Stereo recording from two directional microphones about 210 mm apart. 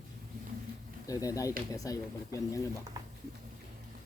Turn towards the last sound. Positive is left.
turn(degrees=-15)  # may be behind; listen again after turning